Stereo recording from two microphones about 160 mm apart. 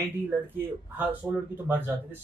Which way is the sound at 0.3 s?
15° right (ahead or behind).